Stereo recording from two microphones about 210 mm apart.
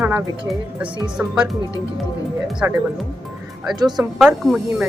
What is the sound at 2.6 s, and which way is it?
Speech, 10° right (ahead or behind).